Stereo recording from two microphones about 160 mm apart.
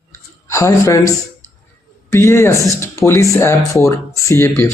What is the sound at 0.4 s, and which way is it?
A woman's voice, 20° left (ahead or behind).